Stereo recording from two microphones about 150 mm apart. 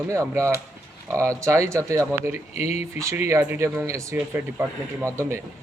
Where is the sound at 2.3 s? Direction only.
45° left (ahead or behind).